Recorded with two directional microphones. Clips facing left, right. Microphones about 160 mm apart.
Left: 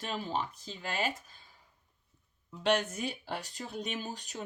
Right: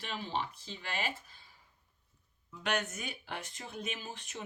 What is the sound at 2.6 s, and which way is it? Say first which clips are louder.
Speech: left 6 dB; 30° left (ahead or behind).